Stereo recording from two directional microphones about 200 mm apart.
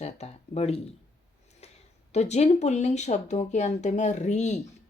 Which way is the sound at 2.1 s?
35° left (ahead or behind).